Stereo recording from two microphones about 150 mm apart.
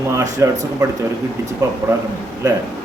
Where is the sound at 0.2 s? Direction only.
20° right (ahead or behind).